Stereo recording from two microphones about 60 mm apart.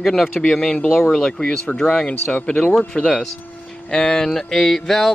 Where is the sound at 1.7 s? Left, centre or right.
Centre.